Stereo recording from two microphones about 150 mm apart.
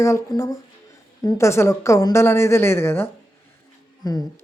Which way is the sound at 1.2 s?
20° left (ahead or behind).